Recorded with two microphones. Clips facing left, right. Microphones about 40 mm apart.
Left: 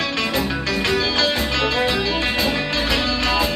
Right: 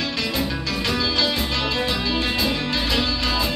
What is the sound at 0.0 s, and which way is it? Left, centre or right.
Music, left.